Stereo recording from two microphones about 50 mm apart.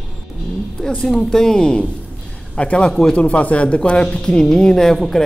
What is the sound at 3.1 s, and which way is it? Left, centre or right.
Speech, left.